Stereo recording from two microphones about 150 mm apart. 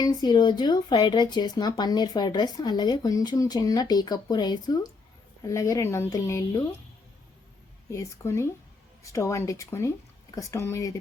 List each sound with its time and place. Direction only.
0.0 s speech: 30° left (ahead or behind)
7.9 s speech: 20° left (ahead or behind)